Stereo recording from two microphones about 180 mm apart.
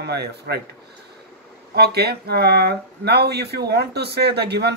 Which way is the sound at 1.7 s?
65° right (ahead or behind).